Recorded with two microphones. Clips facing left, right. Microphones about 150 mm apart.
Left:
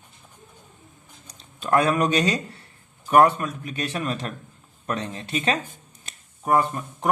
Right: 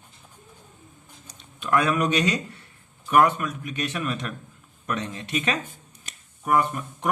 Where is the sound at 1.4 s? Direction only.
35° left (ahead or behind).